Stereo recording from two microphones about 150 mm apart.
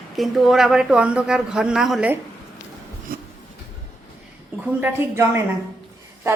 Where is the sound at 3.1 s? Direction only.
75° right (ahead or behind).